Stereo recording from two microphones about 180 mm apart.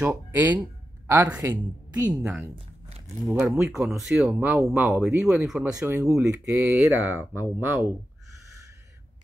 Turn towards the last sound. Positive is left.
turn(degrees=-10)  # may be behind; listen again after turning